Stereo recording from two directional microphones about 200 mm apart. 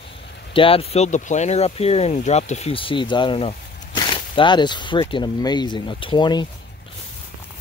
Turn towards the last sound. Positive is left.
turn(degrees=20)  # may be behind; listen again after turning